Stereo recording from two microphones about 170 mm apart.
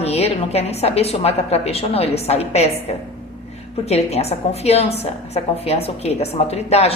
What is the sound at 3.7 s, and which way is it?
A woman's voice, 40° left (ahead or behind).